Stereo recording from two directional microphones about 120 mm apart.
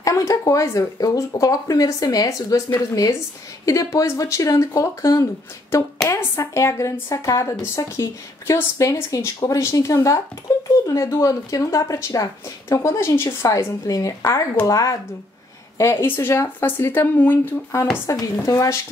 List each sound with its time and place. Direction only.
0.0 s speech: 25° left (ahead or behind)